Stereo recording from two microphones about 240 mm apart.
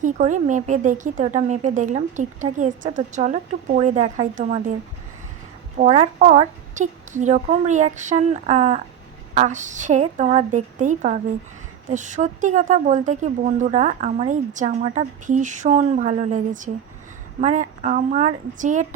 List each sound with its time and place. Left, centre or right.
0.0 s speech: right
5.8 s a woman's voice: right